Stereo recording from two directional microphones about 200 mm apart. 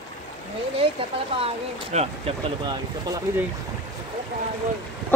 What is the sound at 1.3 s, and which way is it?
Speech, 30° right (ahead or behind).